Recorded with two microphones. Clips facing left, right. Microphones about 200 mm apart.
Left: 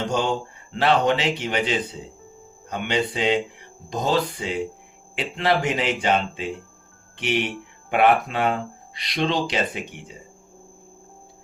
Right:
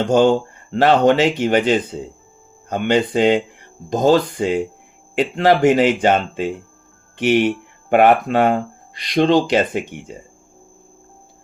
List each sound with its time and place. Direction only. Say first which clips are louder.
0.7 s speech: right 6 dB; 45° right (ahead or behind)